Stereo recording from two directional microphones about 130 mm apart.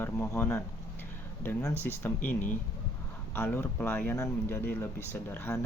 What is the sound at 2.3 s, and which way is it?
Speech, 85° left.